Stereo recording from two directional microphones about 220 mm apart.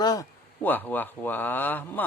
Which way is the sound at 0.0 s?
15° left (ahead or behind).